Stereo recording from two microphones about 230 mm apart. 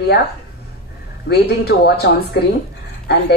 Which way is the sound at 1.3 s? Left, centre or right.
Left.